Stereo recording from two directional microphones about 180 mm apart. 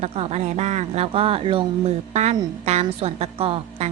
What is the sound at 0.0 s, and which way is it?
A woman's voice, 35° right (ahead or behind).